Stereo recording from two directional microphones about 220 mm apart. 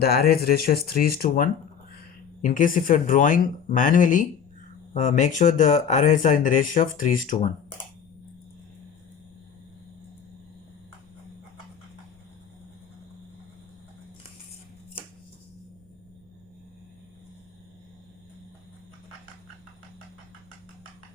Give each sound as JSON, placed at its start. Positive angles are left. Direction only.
{"t": 0.0, "sound": "speech", "side_deg": 45}